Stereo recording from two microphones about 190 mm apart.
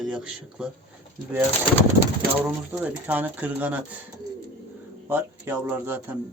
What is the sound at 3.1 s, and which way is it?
Speech, 10° right (ahead or behind).